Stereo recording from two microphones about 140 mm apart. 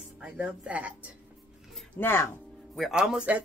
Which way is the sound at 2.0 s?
15° left (ahead or behind).